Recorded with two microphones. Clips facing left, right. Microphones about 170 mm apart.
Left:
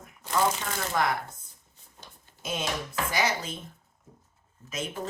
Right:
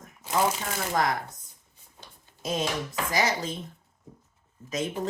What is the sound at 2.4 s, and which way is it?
Speech, 35° right (ahead or behind).